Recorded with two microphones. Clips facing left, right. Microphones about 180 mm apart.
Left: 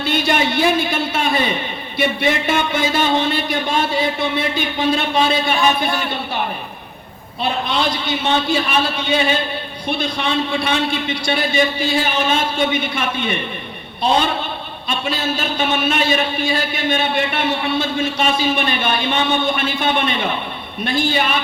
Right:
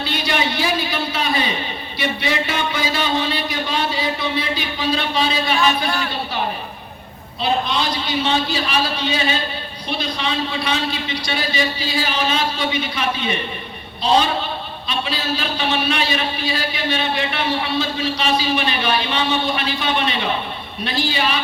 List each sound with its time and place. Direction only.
0.0 s a man's voice: 50° left (ahead or behind)
5.8 s a man's voice: 20° left (ahead or behind)
7.7 s a man's voice: 55° left (ahead or behind)
14.8 s a man's voice: 50° left (ahead or behind)